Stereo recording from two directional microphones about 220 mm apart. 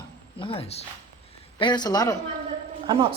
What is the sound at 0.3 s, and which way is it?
Speech, 25° left (ahead or behind).